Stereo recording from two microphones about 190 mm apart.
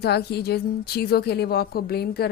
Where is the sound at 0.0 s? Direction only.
60° left (ahead or behind).